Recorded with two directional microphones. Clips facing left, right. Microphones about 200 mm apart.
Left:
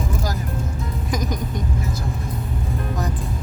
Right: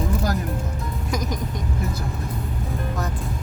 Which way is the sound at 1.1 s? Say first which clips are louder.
Left 2 dB; centre (ahead or behind).